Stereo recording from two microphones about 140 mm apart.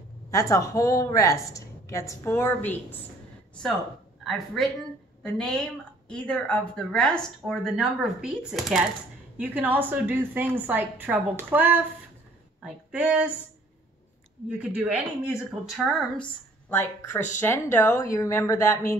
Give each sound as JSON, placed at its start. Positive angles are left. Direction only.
{"t": 0.3, "sound": "a woman's voice", "side_deg": 25}
{"t": 4.2, "sound": "speech", "side_deg": 0}
{"t": 9.4, "sound": "a woman's voice", "side_deg": -10}
{"t": 14.6, "sound": "speech", "side_deg": -10}
{"t": 17.4, "sound": "a woman's voice", "side_deg": 15}